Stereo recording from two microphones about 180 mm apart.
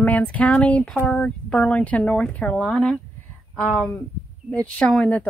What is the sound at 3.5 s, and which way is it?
Speech, 15° left (ahead or behind).